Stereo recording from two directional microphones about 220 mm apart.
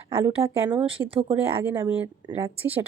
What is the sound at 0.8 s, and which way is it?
Speech, 25° right (ahead or behind).